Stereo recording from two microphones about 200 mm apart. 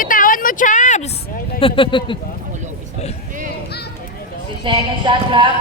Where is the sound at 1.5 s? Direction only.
25° left (ahead or behind).